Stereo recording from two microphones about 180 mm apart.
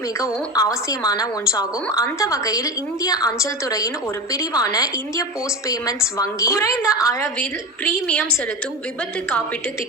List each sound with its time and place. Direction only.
0.2 s a woman's voice: 20° left (ahead or behind)